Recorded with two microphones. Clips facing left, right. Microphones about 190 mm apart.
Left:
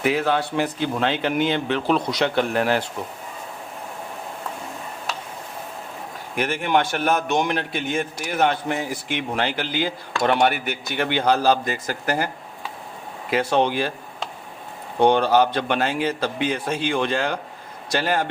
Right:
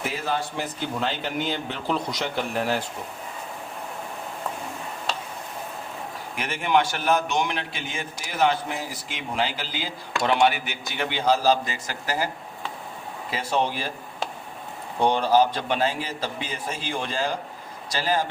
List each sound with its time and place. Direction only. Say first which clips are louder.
0.0 s speech: left 7 dB; 70° left (ahead or behind)
6.3 s a man's voice: left 2 dB; 55° left (ahead or behind)
13.3 s speech: left 6 dB; 65° left (ahead or behind)
15.0 s a man's voice: left 3 dB; 65° left (ahead or behind)